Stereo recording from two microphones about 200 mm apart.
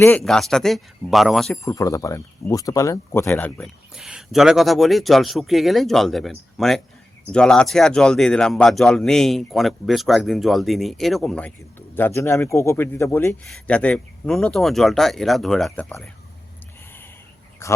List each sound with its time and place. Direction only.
0.3 s speech: centre (ahead or behind)
1.6 s speech: 15° left (ahead or behind)
3.9 s speech: 5° right (ahead or behind)
17.6 s speech: 15° left (ahead or behind)